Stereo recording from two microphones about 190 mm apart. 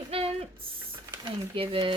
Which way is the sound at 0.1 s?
30° right (ahead or behind).